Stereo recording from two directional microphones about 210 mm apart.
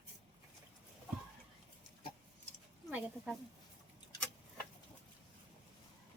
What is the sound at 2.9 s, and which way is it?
Speech, 5° right (ahead or behind).